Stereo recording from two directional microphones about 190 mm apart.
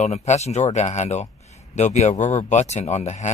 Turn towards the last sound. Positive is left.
turn(degrees=35)  # may be behind; listen again after turning